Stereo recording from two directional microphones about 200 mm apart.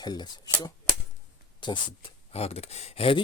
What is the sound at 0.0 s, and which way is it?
Speech, 20° left (ahead or behind).